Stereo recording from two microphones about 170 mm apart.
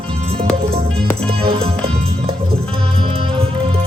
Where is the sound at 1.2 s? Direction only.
35° right (ahead or behind).